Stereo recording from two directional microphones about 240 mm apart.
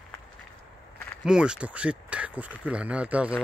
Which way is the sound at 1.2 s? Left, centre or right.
Centre.